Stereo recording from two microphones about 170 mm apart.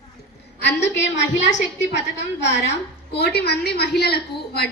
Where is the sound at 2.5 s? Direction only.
80° left.